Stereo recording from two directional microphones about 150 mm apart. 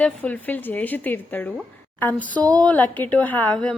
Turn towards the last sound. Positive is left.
turn(degrees=10)  # may be behind; listen again after turning